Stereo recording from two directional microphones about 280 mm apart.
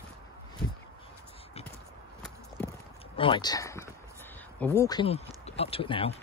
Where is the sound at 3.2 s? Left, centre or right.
Centre.